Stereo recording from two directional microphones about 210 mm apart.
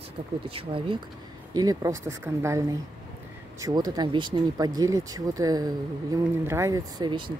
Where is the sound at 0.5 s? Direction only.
25° right (ahead or behind).